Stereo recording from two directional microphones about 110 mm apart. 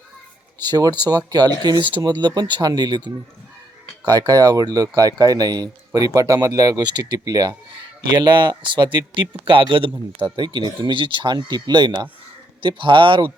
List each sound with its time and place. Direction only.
0.6 s speech: 40° right (ahead or behind)